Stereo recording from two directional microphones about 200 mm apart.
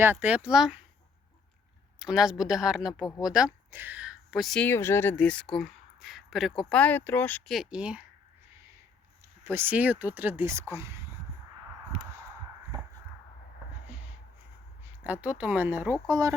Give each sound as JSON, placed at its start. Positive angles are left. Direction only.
{"t": 0.0, "sound": "speech", "side_deg": -10}
{"t": 2.0, "sound": "speech", "side_deg": 0}
{"t": 9.4, "sound": "speech", "side_deg": -10}
{"t": 15.0, "sound": "speech", "side_deg": -5}